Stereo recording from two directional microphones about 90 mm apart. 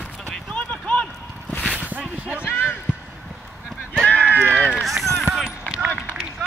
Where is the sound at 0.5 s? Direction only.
15° left (ahead or behind).